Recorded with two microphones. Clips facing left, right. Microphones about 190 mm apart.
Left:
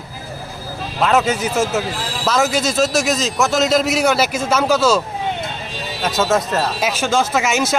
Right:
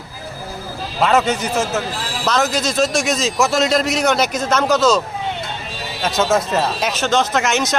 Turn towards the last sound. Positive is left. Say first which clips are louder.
# even
turn(degrees=5)  # may be behind; listen again after turning